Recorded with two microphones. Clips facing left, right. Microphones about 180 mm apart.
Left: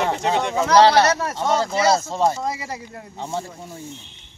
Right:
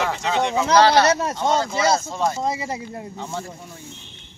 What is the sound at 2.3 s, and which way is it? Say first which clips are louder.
Speech: right 2 dB; 20° right (ahead or behind).